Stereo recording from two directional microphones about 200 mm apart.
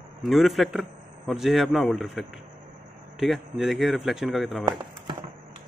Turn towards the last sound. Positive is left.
turn(degrees=0)  # may be behind; listen again after turning